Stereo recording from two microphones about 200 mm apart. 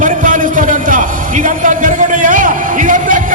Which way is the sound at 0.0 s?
40° right (ahead or behind).